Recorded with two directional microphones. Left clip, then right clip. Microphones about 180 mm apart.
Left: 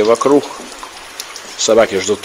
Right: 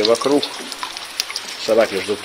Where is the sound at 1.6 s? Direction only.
40° left (ahead or behind).